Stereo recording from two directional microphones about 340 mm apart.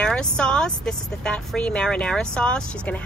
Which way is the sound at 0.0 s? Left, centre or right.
Centre.